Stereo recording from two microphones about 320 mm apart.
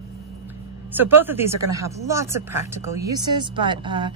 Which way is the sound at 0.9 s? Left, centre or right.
Centre.